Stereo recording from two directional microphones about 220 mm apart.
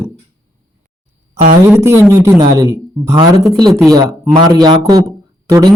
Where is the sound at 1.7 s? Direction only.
10° right (ahead or behind).